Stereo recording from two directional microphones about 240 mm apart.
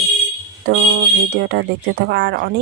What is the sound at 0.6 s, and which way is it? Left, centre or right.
Speech, right.